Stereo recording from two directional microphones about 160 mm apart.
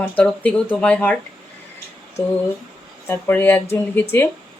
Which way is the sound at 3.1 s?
15° left (ahead or behind).